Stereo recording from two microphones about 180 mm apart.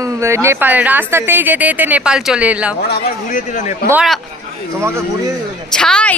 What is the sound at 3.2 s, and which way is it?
Speech, 45° left (ahead or behind).